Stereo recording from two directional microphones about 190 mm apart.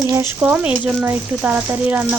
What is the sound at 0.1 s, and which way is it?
Speech, 10° right (ahead or behind).